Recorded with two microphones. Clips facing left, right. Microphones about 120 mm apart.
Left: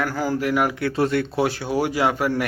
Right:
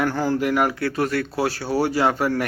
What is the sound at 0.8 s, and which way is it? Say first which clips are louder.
A man's voice: left 2 dB; 25° left (ahead or behind).